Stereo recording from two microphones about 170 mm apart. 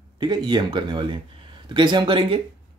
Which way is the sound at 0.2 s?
25° right (ahead or behind).